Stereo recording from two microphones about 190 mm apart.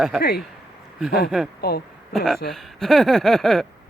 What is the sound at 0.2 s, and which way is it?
Speech, 55° left (ahead or behind).